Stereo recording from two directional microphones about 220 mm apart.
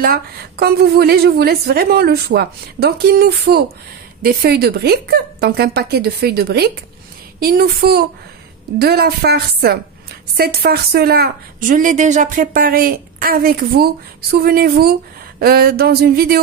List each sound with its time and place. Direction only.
0.0 s a woman's voice: 45° right (ahead or behind)